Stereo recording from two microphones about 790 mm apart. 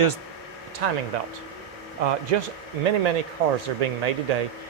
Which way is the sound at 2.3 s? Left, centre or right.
Right.